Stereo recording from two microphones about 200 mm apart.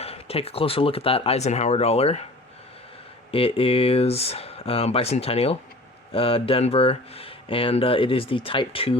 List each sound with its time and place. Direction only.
0.0 s speech: 30° left (ahead or behind)
3.3 s speech: 30° left (ahead or behind)